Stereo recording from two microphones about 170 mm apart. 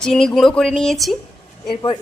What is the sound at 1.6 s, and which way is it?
Speech, 30° left (ahead or behind).